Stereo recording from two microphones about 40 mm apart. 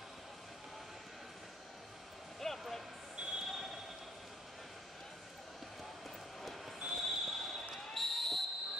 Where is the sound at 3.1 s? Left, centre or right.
Right.